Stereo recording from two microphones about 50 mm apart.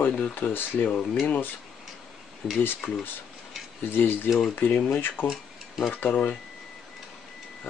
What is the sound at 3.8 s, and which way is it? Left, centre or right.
Speech, left.